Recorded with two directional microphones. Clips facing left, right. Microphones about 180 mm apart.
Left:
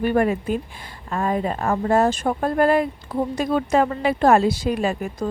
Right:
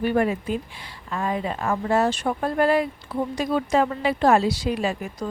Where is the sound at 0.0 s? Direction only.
50° left (ahead or behind).